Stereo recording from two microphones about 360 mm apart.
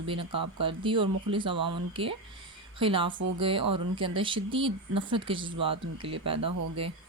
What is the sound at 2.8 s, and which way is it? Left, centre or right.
Speech, centre.